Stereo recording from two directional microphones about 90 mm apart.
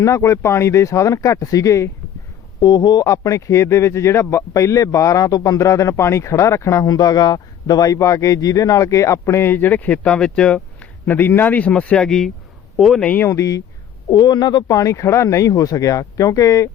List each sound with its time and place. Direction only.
0.0 s a man's voice: 35° left (ahead or behind)
2.6 s a man's voice: 50° left (ahead or behind); by 10.6 s 10° left (ahead or behind)
11.0 s a man's voice: 20° left (ahead or behind); by 13.0 s centre (ahead or behind)
13.0 s a man's voice: 15° left (ahead or behind)
13.2 s a man's voice: 35° left (ahead or behind)
14.1 s a man's voice: 50° left (ahead or behind)